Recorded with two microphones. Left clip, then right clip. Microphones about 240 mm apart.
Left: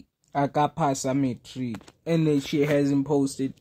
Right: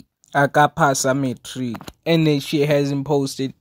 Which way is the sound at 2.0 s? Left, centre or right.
Right.